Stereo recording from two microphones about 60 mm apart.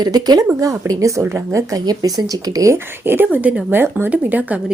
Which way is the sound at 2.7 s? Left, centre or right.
Right.